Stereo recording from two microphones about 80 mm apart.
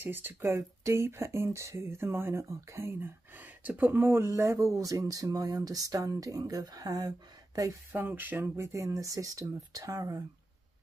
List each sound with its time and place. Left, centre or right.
0.0 s speech: right
4.2 s speech: right
7.9 s speech: right